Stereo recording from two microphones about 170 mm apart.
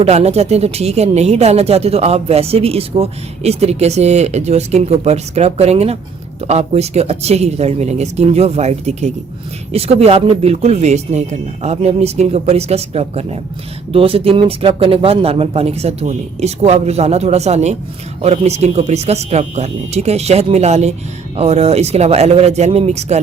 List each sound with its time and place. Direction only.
0.0 s speech: 40° right (ahead or behind)